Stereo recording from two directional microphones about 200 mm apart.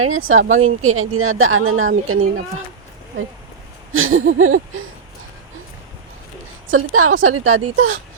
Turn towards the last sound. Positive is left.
turn(degrees=-90)